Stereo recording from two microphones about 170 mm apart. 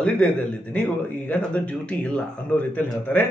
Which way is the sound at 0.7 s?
10° left (ahead or behind).